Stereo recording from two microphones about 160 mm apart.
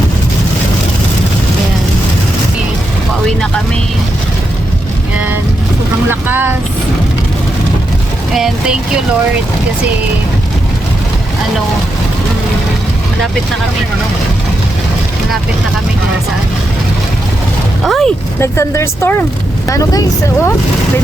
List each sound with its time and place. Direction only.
3.2 s vehicle: 5° left (ahead or behind)
6.1 s vehicle: 15° right (ahead or behind)
8.3 s speech: 5° right (ahead or behind)
17.8 s a sound: centre (ahead or behind)
18.3 s speech: 20° left (ahead or behind)